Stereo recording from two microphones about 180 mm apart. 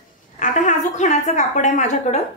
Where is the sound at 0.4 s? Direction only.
45° left (ahead or behind).